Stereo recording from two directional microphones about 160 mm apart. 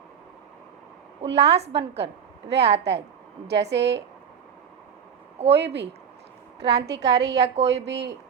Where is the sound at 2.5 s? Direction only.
90° right.